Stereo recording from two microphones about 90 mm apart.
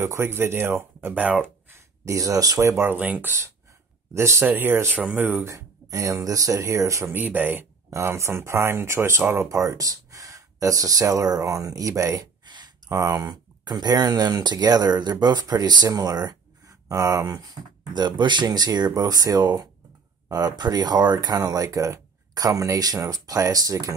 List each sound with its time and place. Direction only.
0.0 s speech: 30° right (ahead or behind)
2.0 s speech: 40° right (ahead or behind)
2.7 s speech: 25° right (ahead or behind)
5.5 s speech: 35° right (ahead or behind)
7.2 s speech: 20° right (ahead or behind)
7.9 s speech: 30° right (ahead or behind)